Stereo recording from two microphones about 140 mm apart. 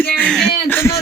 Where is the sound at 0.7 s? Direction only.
20° left (ahead or behind).